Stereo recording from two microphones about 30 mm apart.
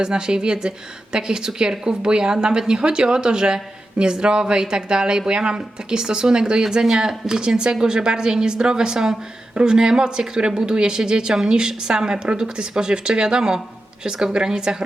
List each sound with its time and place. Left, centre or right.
0.0 s speech: right